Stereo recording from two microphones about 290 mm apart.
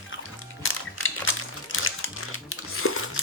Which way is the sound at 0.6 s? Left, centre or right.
Left.